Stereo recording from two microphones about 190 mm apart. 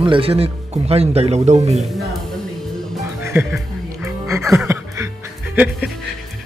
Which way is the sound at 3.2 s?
10° right (ahead or behind).